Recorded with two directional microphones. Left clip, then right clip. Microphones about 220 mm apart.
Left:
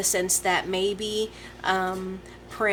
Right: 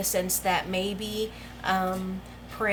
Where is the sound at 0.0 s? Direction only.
35° left (ahead or behind).